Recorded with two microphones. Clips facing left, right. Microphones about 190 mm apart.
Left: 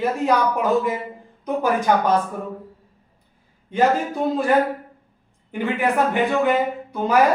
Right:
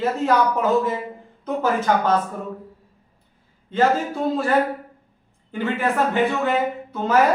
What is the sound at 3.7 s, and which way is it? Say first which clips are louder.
Speech: even; 15° left (ahead or behind).